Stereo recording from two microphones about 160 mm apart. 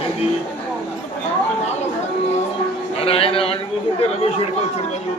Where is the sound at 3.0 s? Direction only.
35° left (ahead or behind).